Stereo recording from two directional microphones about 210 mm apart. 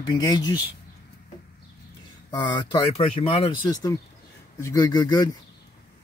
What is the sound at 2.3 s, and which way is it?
Speech, 20° left (ahead or behind).